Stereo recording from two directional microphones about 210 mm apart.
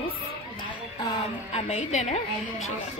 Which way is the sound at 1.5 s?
35° left (ahead or behind).